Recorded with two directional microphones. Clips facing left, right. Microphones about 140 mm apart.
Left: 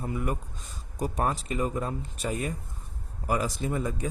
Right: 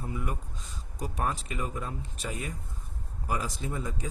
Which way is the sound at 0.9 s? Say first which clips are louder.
Left 4 dB; 45° left (ahead or behind).